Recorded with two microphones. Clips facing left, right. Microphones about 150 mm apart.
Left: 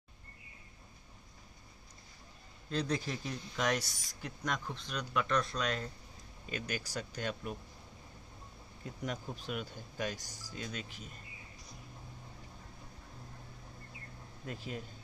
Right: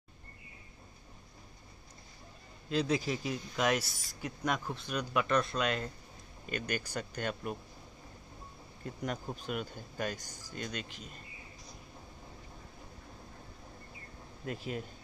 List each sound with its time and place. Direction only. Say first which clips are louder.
2.8 s speech: right 4 dB; 5° right (ahead or behind)
6.6 s speech: right 3 dB; 60° right (ahead or behind)
9.0 s speech: right 2 dB; 45° right (ahead or behind)
10.7 s speech: right 2 dB; 80° right
14.5 s speech: right 4 dB; 5° right (ahead or behind)